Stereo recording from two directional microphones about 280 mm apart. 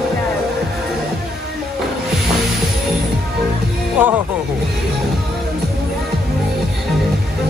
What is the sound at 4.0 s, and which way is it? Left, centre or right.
Music, centre.